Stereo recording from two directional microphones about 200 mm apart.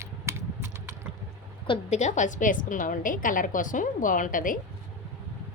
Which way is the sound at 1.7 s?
35° left (ahead or behind).